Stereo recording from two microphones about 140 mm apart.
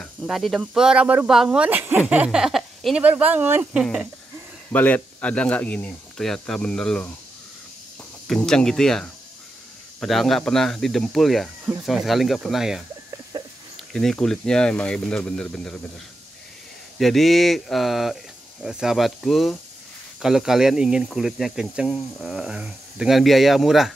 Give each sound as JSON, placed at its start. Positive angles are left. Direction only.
{"t": 0.0, "sound": "speech", "side_deg": 0}
{"t": 3.8, "sound": "speech", "side_deg": 0}
{"t": 4.7, "sound": "speech", "side_deg": 10}
{"t": 8.3, "sound": "speech", "side_deg": 5}
{"t": 13.3, "sound": "a sound", "side_deg": -30}
{"t": 13.7, "sound": "speech", "side_deg": 5}
{"t": 17.0, "sound": "speech", "side_deg": 0}